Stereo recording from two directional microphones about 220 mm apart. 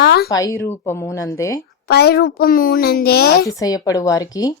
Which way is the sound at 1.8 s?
45° left (ahead or behind).